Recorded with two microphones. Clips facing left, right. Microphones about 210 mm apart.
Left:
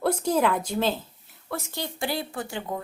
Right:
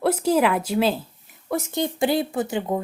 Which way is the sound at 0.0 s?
5° right (ahead or behind).